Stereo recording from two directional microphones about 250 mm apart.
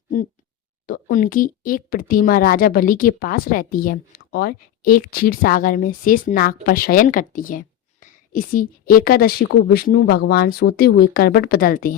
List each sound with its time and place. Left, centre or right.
0.9 s speech: left